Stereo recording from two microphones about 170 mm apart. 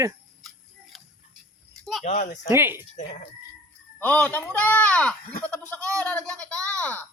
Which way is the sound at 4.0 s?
10° left (ahead or behind).